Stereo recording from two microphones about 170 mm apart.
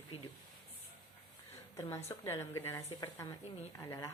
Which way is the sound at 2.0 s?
15° left (ahead or behind).